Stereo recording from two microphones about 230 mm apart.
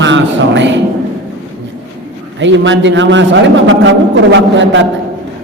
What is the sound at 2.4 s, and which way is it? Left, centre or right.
A man's voice, right.